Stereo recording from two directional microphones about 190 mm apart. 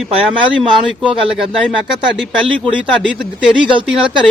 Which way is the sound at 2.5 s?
25° right (ahead or behind).